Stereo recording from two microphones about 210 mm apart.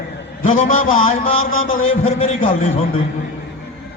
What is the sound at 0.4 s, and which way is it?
A man's voice, 40° left (ahead or behind).